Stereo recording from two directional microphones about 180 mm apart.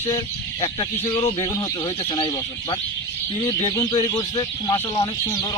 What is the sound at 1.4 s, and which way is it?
Speech, 20° left (ahead or behind).